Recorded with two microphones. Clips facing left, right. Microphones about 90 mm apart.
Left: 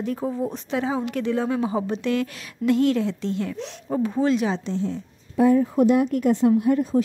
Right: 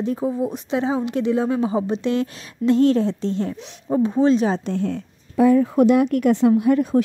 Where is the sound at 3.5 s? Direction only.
5° right (ahead or behind).